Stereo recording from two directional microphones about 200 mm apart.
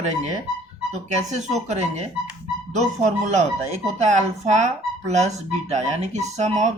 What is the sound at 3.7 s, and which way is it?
Speech, 35° right (ahead or behind).